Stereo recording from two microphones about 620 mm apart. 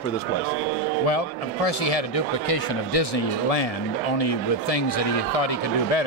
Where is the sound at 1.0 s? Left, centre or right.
Left.